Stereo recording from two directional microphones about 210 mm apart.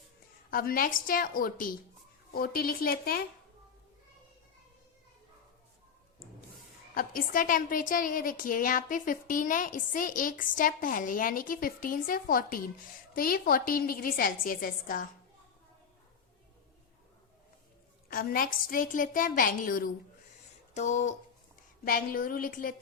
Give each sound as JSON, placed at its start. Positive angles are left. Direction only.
{"t": 0.5, "sound": "a woman's voice", "side_deg": 45}
{"t": 6.9, "sound": "a woman's voice", "side_deg": 45}
{"t": 18.1, "sound": "a woman's voice", "side_deg": 45}